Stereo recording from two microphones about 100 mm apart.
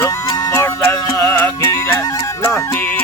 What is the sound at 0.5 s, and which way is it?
Music, 25° left (ahead or behind).